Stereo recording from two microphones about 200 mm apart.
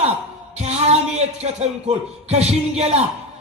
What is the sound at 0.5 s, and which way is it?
A man's voice, 35° right (ahead or behind).